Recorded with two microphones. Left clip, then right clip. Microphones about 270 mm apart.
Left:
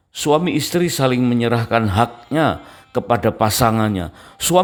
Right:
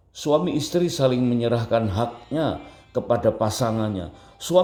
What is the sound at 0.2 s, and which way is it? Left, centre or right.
A man's voice, left.